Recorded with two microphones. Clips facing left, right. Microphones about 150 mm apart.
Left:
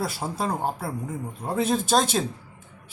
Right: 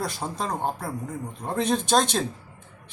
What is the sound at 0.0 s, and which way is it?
Speech, 5° left (ahead or behind).